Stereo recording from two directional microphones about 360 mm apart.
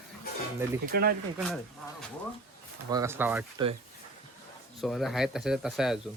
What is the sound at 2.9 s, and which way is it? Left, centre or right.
Speech, centre.